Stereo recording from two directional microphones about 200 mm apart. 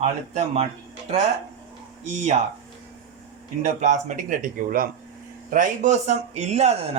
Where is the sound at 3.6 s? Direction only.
35° right (ahead or behind).